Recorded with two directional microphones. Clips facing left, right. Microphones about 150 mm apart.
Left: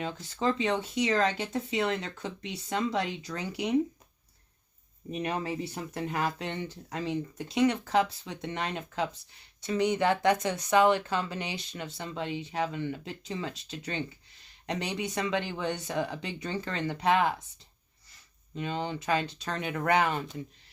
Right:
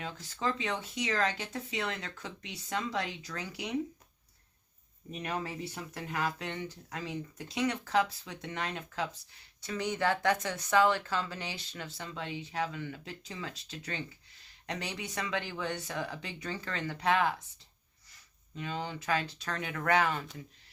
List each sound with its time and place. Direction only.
0.0 s speech: 25° left (ahead or behind)
5.1 s speech: 20° left (ahead or behind)
18.5 s speech: 25° left (ahead or behind)